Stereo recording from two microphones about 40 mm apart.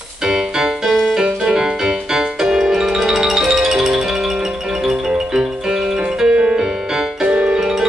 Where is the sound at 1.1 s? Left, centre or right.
Centre.